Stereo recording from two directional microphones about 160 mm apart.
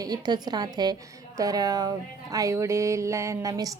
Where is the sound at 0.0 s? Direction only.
25° right (ahead or behind).